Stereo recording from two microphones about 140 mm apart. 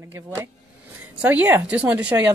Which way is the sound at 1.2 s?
10° right (ahead or behind).